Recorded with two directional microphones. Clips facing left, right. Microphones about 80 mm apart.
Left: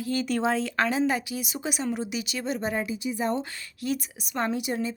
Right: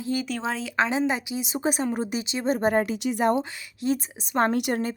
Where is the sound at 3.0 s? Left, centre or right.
Right.